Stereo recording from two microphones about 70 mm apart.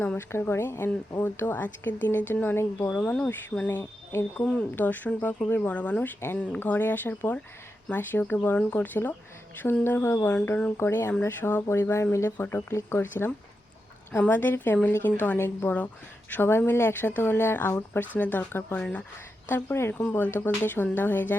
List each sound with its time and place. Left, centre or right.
0.0 s speech: left
0.3 s speech: left
2.9 s speech: centre
3.7 s speech: left
19.9 s speech: left